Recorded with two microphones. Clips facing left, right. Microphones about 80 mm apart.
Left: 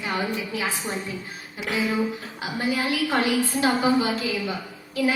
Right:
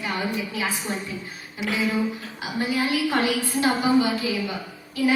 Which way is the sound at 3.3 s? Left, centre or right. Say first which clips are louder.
Left 1 dB; left.